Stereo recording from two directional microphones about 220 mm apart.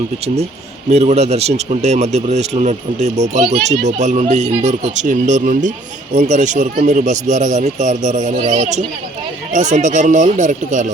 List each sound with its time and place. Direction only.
0.9 s speech: 30° right (ahead or behind)